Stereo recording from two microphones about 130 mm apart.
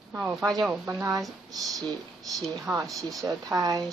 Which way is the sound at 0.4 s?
25° right (ahead or behind).